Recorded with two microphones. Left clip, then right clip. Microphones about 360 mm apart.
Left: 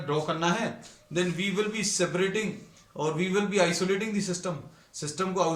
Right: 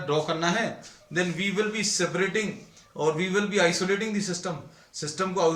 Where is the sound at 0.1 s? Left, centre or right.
Centre.